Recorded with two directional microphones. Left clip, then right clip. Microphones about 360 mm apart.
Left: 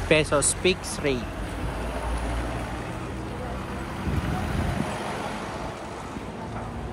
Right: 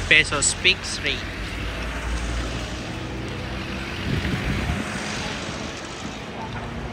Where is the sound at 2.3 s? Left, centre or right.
Centre.